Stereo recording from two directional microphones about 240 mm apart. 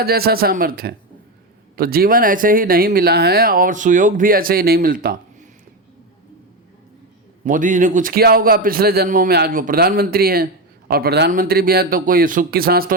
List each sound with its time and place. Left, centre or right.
0.0 s a man's voice: right
7.4 s a man's voice: right